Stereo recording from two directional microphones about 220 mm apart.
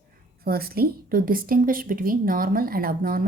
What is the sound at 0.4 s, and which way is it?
A woman's voice, 45° right (ahead or behind).